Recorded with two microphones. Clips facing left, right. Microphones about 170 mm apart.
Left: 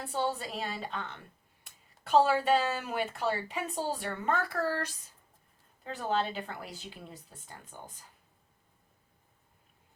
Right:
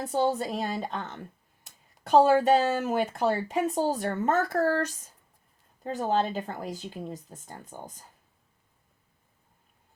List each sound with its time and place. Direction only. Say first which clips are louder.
0.0 s speech: right 7 dB; 40° right (ahead or behind)